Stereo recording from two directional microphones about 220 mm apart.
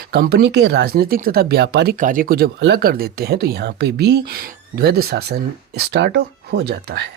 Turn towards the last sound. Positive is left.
turn(degrees=-50)  # may be behind; listen again after turning